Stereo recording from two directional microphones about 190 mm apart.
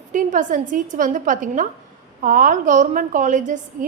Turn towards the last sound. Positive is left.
turn(degrees=-40)  # may be behind; listen again after turning